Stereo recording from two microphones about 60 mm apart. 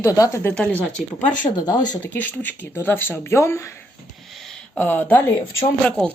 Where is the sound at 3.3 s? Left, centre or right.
Left.